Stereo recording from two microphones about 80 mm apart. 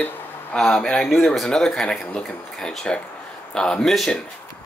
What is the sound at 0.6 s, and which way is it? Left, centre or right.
Speech, centre.